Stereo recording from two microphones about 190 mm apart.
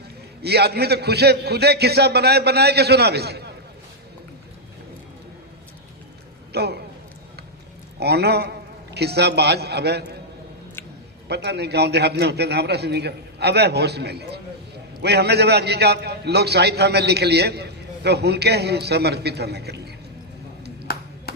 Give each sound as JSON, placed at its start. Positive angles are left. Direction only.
{"t": 0.4, "sound": "a man's voice", "side_deg": -60}
{"t": 6.5, "sound": "a sound", "side_deg": -60}
{"t": 7.9, "sound": "a man's voice", "side_deg": -60}
{"t": 11.3, "sound": "a man's voice", "side_deg": -60}
{"t": 20.9, "sound": "music", "side_deg": 50}